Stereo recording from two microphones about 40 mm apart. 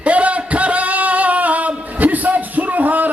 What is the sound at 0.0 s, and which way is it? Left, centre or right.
Singing, right.